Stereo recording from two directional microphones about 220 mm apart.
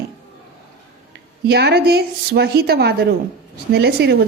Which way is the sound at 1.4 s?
50° right (ahead or behind).